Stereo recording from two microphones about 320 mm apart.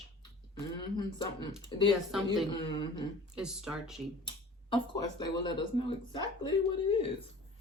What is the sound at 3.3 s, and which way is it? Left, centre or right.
Speech, centre.